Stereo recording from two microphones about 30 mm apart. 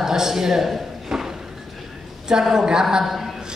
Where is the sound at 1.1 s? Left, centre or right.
Centre.